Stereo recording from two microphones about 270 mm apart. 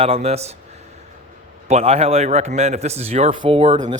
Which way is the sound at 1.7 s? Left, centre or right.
Right.